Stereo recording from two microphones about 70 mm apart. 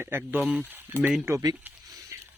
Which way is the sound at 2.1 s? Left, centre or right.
Right.